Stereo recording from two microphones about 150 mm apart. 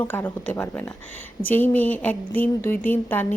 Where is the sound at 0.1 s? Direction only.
15° left (ahead or behind).